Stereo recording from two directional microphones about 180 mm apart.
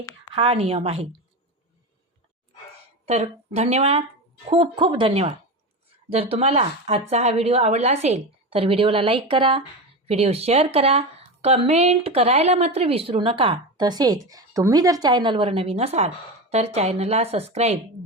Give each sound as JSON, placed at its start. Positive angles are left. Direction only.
{"t": 0.3, "sound": "speech", "side_deg": -30}
{"t": 3.1, "sound": "speech", "side_deg": -35}